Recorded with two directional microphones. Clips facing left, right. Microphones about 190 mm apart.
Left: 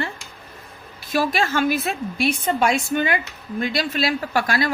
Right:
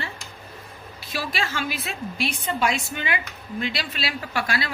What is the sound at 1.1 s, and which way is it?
A woman's voice, 50° left (ahead or behind).